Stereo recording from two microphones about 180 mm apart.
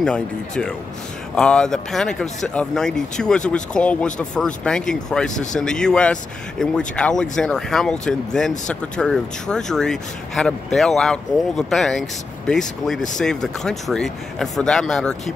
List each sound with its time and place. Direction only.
0.0 s speech: 5° left (ahead or behind)